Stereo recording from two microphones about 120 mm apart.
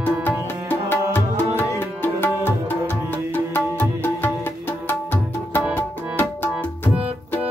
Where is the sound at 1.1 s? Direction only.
20° left (ahead or behind).